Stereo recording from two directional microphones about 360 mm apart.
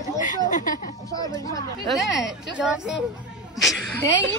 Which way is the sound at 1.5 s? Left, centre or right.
Centre.